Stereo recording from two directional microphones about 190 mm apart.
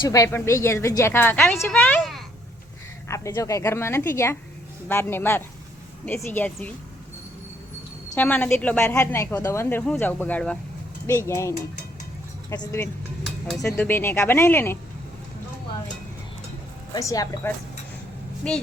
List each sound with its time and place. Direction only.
0.0 s a woman's voice: 20° left (ahead or behind)
3.1 s speech: 15° left (ahead or behind)
8.1 s speech: 10° left (ahead or behind)
16.9 s speech: 20° left (ahead or behind)
18.4 s speech: 5° left (ahead or behind)